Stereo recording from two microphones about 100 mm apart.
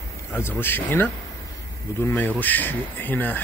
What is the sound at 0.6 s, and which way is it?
Speech, 20° left (ahead or behind).